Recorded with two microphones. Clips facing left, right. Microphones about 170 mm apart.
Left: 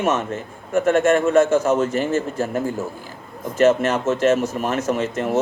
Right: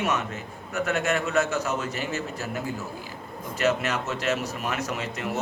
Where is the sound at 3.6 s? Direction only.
50° left (ahead or behind).